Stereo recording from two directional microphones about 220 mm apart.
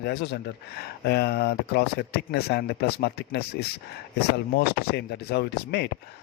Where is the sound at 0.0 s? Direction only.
50° left (ahead or behind).